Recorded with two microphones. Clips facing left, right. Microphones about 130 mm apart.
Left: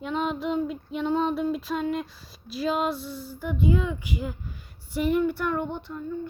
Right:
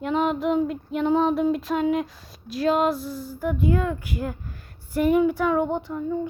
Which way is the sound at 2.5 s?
Centre (ahead or behind).